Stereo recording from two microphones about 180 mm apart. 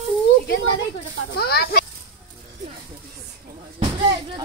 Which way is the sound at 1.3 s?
60° left (ahead or behind).